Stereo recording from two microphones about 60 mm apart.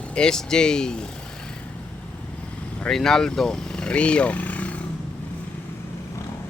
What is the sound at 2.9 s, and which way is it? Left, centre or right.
Speech, centre.